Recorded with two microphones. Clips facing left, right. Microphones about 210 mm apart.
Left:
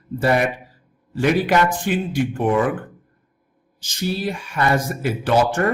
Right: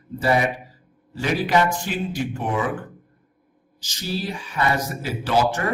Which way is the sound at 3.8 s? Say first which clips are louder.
Left 4 dB; 55° left (ahead or behind).